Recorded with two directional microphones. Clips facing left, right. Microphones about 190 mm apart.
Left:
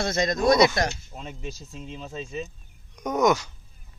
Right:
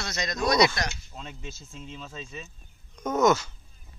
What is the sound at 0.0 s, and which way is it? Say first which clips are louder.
Speech: left 9 dB; 50° left (ahead or behind).